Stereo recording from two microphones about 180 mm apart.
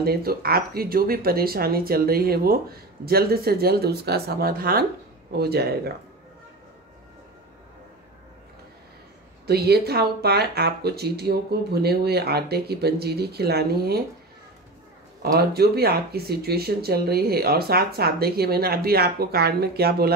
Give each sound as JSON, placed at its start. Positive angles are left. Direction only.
{"t": 0.0, "sound": "speech", "side_deg": -55}
{"t": 9.5, "sound": "speech", "side_deg": -60}
{"t": 15.3, "sound": "speech", "side_deg": -60}